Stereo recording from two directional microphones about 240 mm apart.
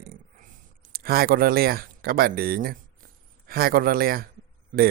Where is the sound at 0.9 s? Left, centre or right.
Right.